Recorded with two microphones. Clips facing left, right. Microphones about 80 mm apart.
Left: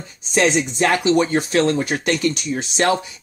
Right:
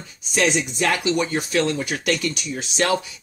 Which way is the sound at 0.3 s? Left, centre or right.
Left.